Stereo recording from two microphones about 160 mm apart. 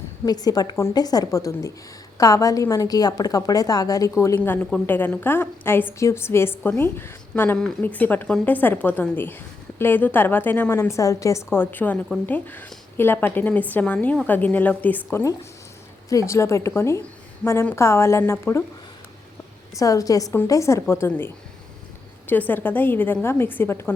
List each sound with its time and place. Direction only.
0.3 s a woman's voice: 25° left (ahead or behind)
19.8 s a woman's voice: 20° left (ahead or behind)
22.3 s a woman's voice: 10° left (ahead or behind)